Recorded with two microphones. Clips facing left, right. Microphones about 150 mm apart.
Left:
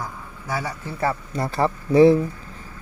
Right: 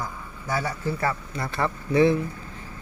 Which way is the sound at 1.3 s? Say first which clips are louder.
Left 5 dB; 35° left (ahead or behind).